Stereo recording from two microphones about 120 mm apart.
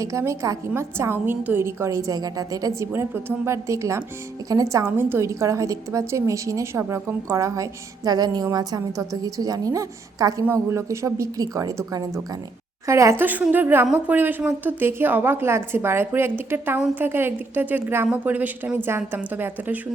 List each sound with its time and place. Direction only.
0.0 s a woman's voice: 25° right (ahead or behind)
13.2 s a woman's voice: 15° right (ahead or behind)